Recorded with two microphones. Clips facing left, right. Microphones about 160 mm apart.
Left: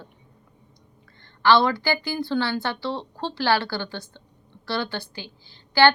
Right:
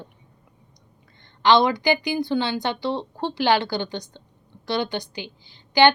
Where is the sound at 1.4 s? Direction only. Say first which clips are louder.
Right 1 dB; 15° right (ahead or behind).